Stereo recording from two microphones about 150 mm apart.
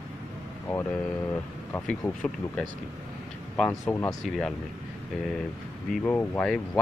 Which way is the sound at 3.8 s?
20° left (ahead or behind).